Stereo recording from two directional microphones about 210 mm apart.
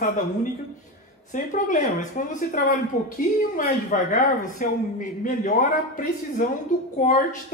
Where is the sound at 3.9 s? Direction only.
35° left (ahead or behind).